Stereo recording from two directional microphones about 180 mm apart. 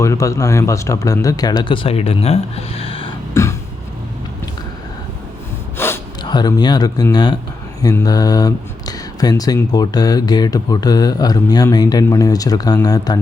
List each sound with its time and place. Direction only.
0.0 s speech: 15° left (ahead or behind)
3.4 s vehicle: 15° left (ahead or behind)
5.7 s gasp: 15° left (ahead or behind)
6.2 s speech: 25° left (ahead or behind)